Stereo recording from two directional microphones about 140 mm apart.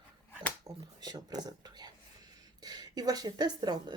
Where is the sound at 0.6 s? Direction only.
30° right (ahead or behind).